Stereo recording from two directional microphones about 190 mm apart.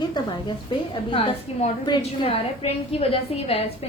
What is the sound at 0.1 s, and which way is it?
A woman's voice, 25° left (ahead or behind).